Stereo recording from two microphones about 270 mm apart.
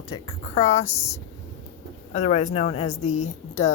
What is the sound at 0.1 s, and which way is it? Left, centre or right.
Speech, left.